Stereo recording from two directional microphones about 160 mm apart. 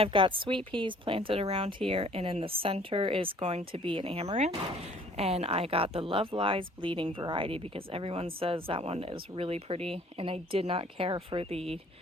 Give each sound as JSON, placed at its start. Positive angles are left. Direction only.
{"t": 0.0, "sound": "speech", "side_deg": -30}